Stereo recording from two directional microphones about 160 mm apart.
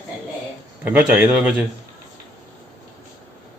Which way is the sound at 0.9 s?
10° right (ahead or behind).